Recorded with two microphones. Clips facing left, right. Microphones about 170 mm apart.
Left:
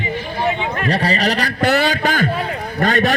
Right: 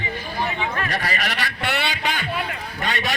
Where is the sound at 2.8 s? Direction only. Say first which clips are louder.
Left 10 dB; 45° left (ahead or behind).